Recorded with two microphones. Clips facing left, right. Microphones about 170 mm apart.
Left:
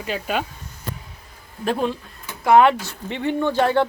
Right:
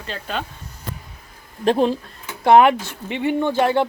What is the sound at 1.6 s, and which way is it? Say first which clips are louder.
Speech: right 5 dB; 25° right (ahead or behind).